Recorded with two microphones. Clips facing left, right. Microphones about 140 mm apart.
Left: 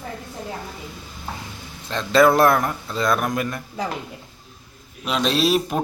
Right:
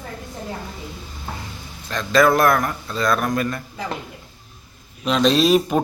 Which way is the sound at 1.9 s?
25° left (ahead or behind).